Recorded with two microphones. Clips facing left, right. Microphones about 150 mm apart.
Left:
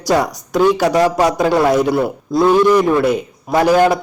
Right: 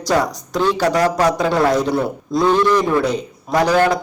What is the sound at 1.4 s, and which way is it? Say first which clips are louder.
A man's voice: left 3 dB; 5° left (ahead or behind).